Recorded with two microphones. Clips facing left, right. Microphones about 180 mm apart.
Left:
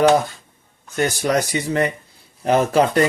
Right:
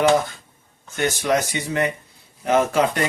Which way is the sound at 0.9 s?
40° left (ahead or behind).